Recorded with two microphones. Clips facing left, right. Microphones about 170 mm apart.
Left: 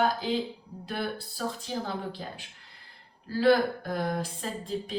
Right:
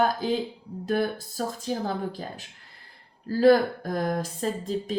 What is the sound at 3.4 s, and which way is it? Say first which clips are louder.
A woman's voice: right 4 dB; 40° right (ahead or behind).